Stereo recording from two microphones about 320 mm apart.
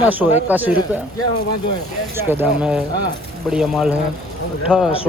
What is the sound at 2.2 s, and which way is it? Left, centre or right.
Speech, centre.